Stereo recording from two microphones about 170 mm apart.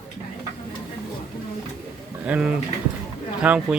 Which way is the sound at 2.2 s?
10° right (ahead or behind).